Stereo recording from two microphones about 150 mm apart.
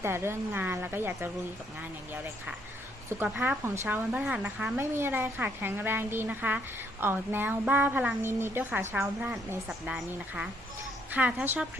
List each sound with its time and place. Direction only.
0.0 s a woman's voice: 15° right (ahead or behind)
3.2 s a woman's voice: 5° right (ahead or behind)